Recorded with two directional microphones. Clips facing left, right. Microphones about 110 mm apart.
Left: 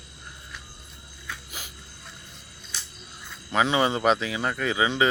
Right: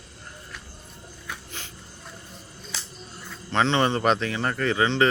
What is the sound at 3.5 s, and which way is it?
Speech, 10° left (ahead or behind).